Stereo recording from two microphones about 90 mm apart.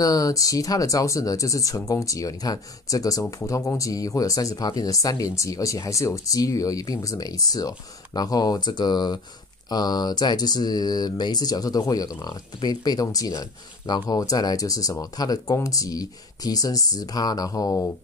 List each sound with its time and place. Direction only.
0.0 s speech: 40° left (ahead or behind)